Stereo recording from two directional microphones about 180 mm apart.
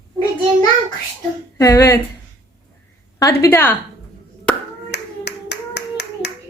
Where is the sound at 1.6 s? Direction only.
15° left (ahead or behind).